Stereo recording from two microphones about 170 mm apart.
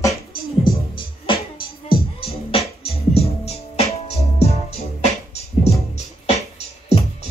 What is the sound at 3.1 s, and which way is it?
Music, 35° left (ahead or behind).